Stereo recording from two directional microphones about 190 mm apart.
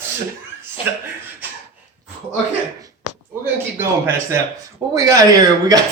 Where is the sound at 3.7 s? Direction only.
15° right (ahead or behind).